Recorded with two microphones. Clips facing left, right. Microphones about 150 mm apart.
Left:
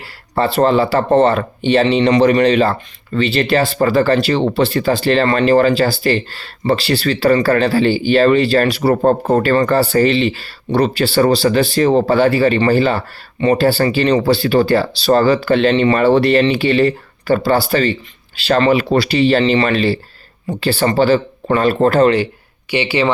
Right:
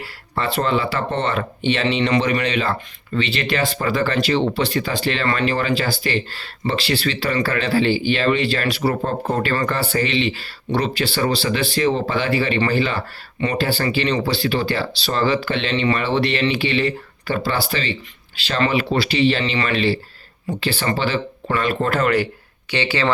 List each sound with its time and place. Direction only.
0.3 s speech: 35° left (ahead or behind)
22.7 s speech: 15° left (ahead or behind)